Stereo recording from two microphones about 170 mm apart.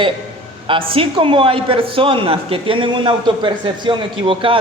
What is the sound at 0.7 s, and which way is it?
A man's voice, 30° right (ahead or behind).